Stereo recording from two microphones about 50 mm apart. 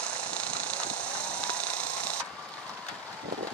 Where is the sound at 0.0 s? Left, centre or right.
Left.